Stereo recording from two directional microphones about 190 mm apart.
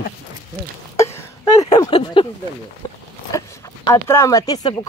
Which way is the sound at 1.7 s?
25° left (ahead or behind).